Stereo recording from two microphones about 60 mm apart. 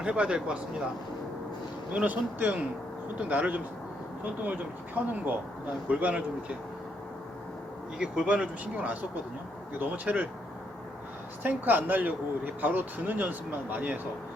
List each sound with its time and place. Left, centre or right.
0.0 s speech: centre
1.9 s speech: right
7.9 s speech: centre
11.4 s speech: right